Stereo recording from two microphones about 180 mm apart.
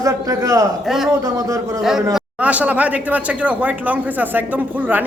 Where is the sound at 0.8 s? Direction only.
Centre (ahead or behind).